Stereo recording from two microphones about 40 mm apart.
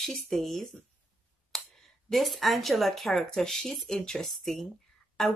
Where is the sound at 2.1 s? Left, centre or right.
Centre.